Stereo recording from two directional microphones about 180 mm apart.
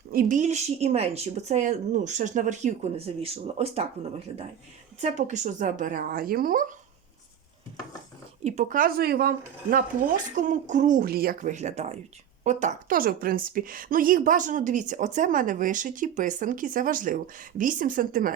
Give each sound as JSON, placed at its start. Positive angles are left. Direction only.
{"t": 0.1, "sound": "speech", "side_deg": -50}
{"t": 3.2, "sound": "a woman's voice", "side_deg": -35}
{"t": 8.4, "sound": "a woman's voice", "side_deg": -45}